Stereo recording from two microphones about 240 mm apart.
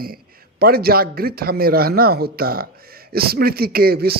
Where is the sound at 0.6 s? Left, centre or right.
Right.